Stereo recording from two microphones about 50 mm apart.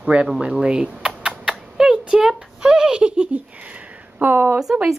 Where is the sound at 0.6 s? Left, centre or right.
Right.